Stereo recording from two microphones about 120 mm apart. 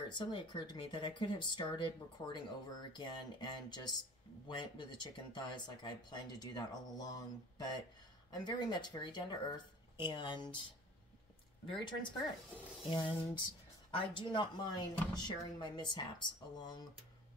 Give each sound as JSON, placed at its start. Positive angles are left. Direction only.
{"t": 0.1, "sound": "speech", "side_deg": 40}
{"t": 11.7, "sound": "speech", "side_deg": 40}